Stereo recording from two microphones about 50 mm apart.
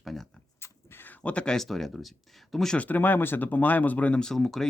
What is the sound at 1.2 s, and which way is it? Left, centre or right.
Speech, left.